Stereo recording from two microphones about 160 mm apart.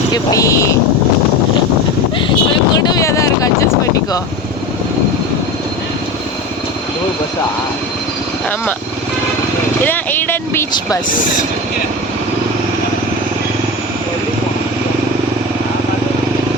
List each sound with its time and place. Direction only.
0.1 s speech: 20° left (ahead or behind)
2.8 s a sound: 20° left (ahead or behind)
9.8 s speech: 10° left (ahead or behind)